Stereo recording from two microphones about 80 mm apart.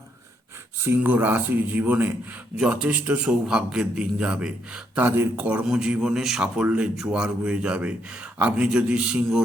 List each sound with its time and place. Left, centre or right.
0.9 s speech: right
2.6 s speech: centre
4.9 s speech: right
5.5 s speech: centre